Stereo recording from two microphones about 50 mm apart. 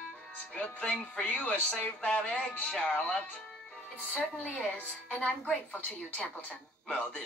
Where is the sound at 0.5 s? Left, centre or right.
Left.